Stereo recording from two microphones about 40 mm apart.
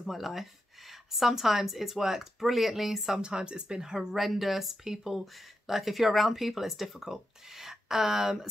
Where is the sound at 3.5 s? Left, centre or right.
Right.